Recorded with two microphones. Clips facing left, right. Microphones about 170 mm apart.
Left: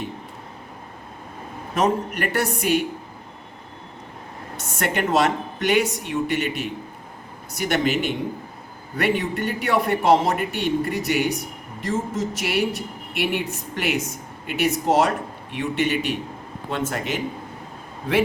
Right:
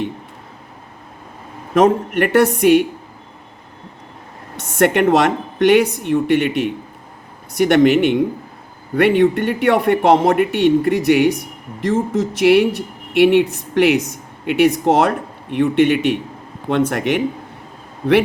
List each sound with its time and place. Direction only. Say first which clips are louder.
1.7 s speech: right 8 dB; 60° right (ahead or behind)
4.8 s speech: right 7 dB; 60° right (ahead or behind)